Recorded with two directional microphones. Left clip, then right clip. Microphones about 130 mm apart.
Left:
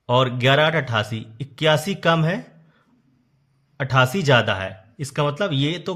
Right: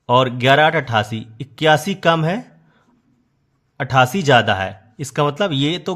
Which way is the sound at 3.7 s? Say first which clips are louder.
Right 4 dB; 25° right (ahead or behind).